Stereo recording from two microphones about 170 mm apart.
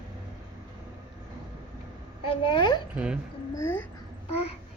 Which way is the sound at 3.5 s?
20° left (ahead or behind).